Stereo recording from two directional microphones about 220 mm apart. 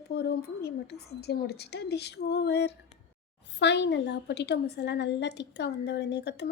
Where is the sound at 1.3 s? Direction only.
50° left (ahead or behind).